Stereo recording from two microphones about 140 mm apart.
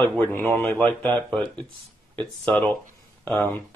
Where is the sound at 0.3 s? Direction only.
15° left (ahead or behind).